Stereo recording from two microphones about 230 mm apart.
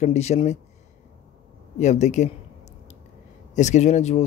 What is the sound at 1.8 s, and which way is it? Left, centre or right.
Speech, left.